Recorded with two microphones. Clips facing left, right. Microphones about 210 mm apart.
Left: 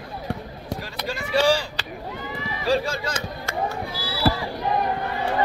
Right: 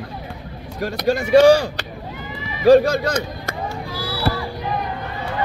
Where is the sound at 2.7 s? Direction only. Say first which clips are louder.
Right 11 dB; 45° right (ahead or behind).